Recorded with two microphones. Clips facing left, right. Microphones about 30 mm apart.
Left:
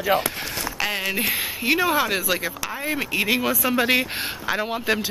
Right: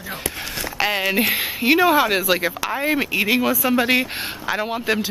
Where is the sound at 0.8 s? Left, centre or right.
Centre.